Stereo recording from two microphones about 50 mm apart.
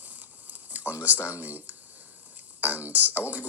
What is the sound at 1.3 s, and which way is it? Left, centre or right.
Speech, right.